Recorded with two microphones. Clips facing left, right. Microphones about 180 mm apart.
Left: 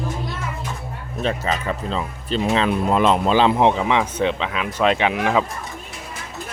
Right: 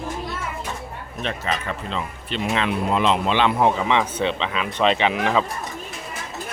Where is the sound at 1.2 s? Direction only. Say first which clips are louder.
Left 4 dB; 35° left (ahead or behind).